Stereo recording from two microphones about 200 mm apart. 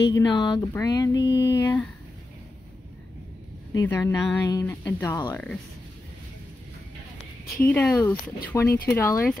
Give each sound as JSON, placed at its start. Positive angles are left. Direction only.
{"t": 0.1, "sound": "speech", "side_deg": 20}
{"t": 3.7, "sound": "speech", "side_deg": 15}
{"t": 7.6, "sound": "speech", "side_deg": 10}